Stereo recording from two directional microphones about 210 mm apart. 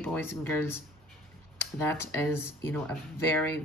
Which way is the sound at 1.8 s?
10° left (ahead or behind).